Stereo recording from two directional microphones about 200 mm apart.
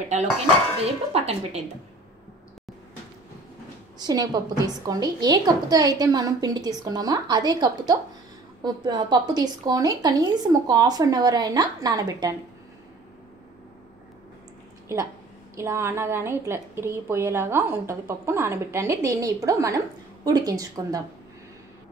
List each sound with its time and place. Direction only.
0.8 s speech: 30° right (ahead or behind)
4.0 s a woman's voice: 20° right (ahead or behind)
15.5 s a woman's voice: 15° right (ahead or behind)